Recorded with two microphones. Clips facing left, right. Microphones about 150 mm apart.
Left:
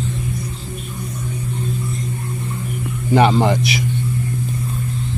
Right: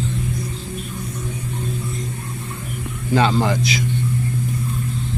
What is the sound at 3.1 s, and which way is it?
Speech, 20° left (ahead or behind).